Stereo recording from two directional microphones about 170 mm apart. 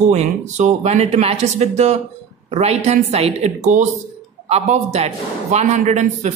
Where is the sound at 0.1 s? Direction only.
40° right (ahead or behind).